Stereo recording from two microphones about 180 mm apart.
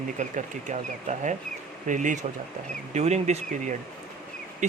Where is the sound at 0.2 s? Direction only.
40° right (ahead or behind).